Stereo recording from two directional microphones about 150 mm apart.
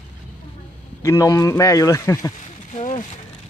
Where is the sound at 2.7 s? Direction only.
50° left (ahead or behind).